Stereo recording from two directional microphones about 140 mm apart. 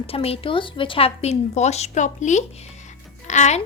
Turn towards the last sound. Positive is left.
turn(degrees=55)  # may be behind; listen again after turning